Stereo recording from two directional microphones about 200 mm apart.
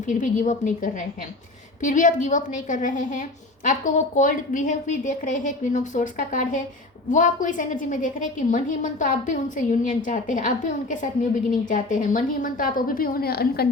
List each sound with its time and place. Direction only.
0.0 s a woman's voice: 40° left (ahead or behind)